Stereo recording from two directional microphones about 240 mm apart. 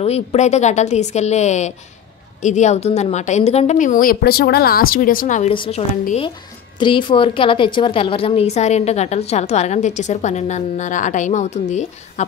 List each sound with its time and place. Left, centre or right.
0.0 s a woman's voice: left